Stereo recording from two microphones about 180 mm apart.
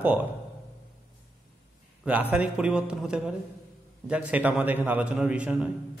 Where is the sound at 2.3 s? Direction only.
5° right (ahead or behind).